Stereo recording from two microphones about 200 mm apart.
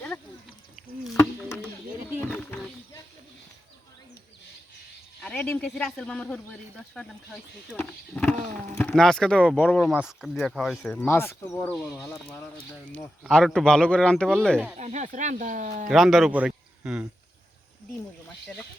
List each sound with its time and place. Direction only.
5.2 s speech: 10° left (ahead or behind)
11.8 s speech: centre (ahead or behind)
14.8 s speech: 35° right (ahead or behind)
15.9 s speech: centre (ahead or behind)